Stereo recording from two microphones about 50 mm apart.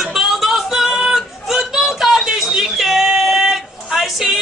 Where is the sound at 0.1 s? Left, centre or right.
Centre.